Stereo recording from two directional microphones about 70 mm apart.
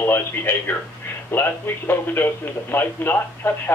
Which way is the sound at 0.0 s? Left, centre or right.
Left.